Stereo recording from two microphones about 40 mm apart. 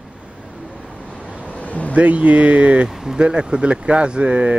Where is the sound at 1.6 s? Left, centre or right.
Left.